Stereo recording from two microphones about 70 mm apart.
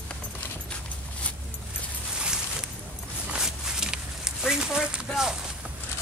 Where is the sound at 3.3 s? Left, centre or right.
Centre.